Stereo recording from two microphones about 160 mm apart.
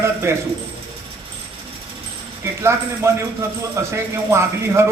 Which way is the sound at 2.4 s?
15° right (ahead or behind).